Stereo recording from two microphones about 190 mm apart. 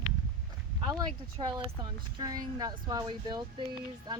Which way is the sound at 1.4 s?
25° right (ahead or behind).